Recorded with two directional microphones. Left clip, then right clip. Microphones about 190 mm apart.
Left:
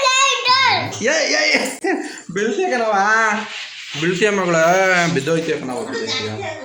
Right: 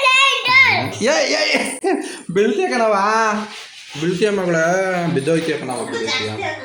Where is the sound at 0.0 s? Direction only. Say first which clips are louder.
Right 1 dB; 5° right (ahead or behind).